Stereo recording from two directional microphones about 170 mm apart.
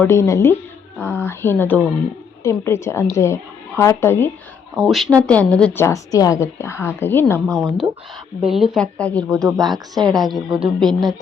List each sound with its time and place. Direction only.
0.0 s speech: 15° left (ahead or behind)
4.8 s speech: centre (ahead or behind)
9.7 s a woman's voice: 25° right (ahead or behind)
10.2 s speech: centre (ahead or behind)